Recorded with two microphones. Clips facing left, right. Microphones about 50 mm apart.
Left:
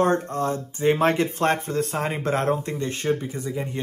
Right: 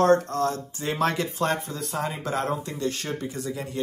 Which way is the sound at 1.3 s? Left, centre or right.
Left.